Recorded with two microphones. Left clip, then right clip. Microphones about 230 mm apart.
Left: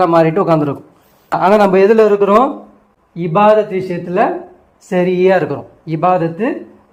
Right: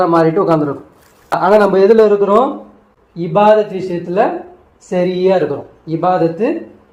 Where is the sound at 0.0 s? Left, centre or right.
Left.